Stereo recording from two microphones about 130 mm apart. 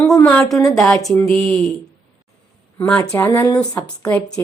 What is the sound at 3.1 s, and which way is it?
Speech, 20° left (ahead or behind).